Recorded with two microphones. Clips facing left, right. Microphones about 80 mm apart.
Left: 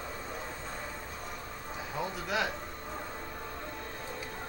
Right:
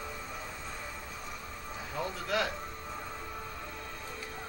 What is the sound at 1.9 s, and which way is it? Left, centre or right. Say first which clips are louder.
Speech: right 1 dB; centre.